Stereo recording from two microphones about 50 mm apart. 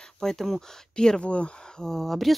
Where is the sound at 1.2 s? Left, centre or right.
Left.